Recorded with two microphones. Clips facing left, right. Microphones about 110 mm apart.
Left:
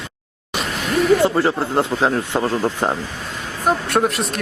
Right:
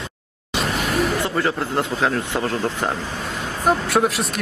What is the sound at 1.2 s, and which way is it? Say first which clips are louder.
Speech: left 4 dB; 30° left (ahead or behind).